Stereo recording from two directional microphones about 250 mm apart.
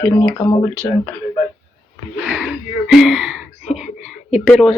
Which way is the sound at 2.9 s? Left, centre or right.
Centre.